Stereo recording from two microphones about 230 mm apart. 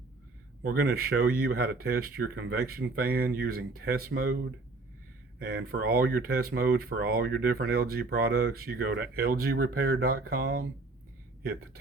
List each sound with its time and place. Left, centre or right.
0.6 s speech: right
5.4 s speech: right